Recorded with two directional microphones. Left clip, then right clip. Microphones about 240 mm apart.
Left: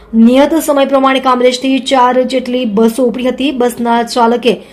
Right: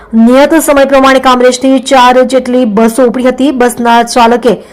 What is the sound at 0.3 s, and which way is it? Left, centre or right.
Speech, centre.